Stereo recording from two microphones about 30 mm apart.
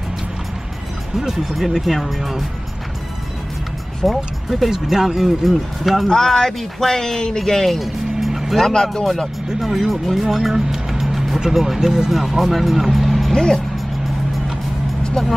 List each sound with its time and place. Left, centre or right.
1.3 s speech: centre
4.0 s speech: centre
4.6 s speech: centre
6.0 s speech: centre
8.3 s music: centre
8.6 s speech: centre
10.1 s music: centre
11.6 s speech: centre
12.1 s speech: centre
13.3 s speech: centre
15.2 s speech: centre